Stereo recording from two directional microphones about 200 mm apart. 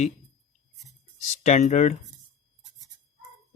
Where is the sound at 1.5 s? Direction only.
35° left (ahead or behind).